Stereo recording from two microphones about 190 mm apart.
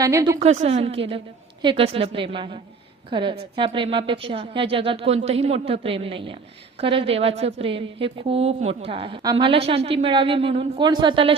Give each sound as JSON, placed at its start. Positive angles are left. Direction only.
{"t": 0.0, "sound": "a woman's voice", "side_deg": -20}
{"t": 0.3, "sound": "a woman's voice", "side_deg": -35}